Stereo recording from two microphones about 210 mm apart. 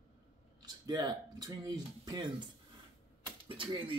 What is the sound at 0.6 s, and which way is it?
Speech, 20° right (ahead or behind).